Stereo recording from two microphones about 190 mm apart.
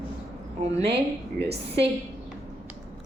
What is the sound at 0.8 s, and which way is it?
Speech, 60° right (ahead or behind).